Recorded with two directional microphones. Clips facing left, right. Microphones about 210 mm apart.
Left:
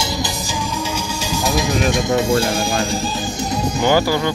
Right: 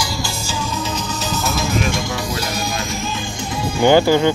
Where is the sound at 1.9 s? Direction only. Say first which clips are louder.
Left 6 dB; 20° left (ahead or behind).